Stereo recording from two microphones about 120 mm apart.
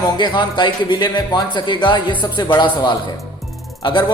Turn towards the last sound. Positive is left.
turn(degrees=40)  # may be behind; listen again after turning